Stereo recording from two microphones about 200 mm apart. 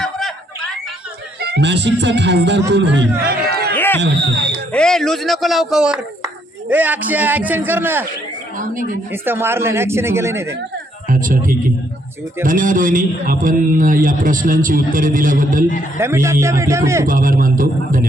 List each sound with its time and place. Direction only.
0.0 s snicker: centre (ahead or behind)
1.4 s speech: 55° right (ahead or behind)
3.2 s a sound: 50° right (ahead or behind)
3.8 s music: 10° left (ahead or behind)
4.0 s speech: 55° right (ahead or behind)
4.7 s a man's voice: 5° left (ahead or behind)
8.5 s speech: 40° right (ahead or behind)
9.2 s speech: 10° right (ahead or behind)
11.1 s a man's voice: 40° right (ahead or behind)
16.0 s speech: 15° right (ahead or behind)
17.1 s a man's voice: 40° right (ahead or behind)